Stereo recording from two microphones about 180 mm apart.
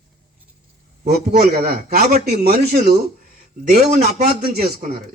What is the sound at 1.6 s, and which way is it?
Speech, 60° right (ahead or behind).